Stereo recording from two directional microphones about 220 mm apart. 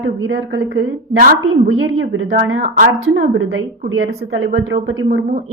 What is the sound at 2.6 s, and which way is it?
Speech, 40° right (ahead or behind).